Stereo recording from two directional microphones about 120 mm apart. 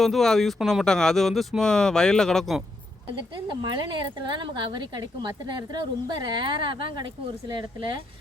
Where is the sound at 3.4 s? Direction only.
40° right (ahead or behind).